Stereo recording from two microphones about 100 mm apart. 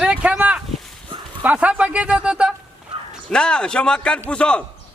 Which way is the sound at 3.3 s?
10° left (ahead or behind).